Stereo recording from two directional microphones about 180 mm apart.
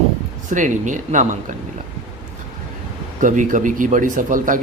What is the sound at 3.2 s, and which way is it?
Speech, 45° right (ahead or behind).